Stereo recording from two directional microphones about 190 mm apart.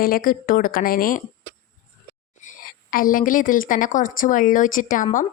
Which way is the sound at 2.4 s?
45° left (ahead or behind).